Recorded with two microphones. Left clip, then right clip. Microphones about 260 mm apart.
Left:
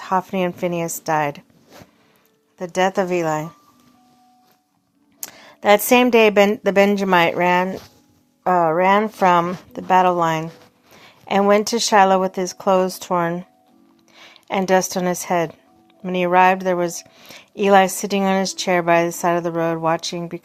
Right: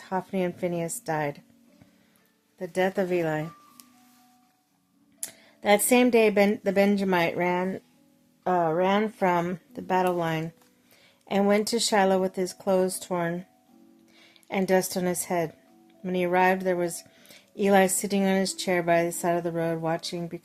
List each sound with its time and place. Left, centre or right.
0.0 s speech: centre
2.6 s speech: centre
5.2 s speech: centre